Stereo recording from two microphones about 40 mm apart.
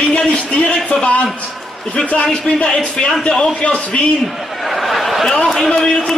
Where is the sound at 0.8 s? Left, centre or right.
Left.